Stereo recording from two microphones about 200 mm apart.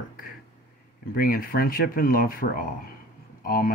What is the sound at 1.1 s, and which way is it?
Speech, 45° left (ahead or behind).